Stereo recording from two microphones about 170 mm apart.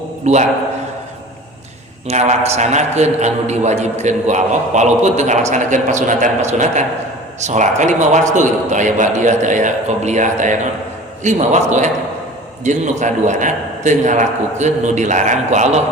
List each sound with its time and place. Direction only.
0.3 s a man's voice: 40° right (ahead or behind)
2.0 s a man's voice: 40° right (ahead or behind)